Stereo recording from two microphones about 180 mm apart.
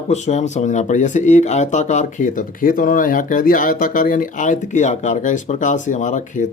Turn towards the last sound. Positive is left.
turn(degrees=45)  # may be behind; listen again after turning